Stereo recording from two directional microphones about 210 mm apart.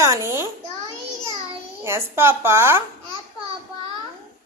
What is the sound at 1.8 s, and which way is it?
A woman's voice, 10° right (ahead or behind).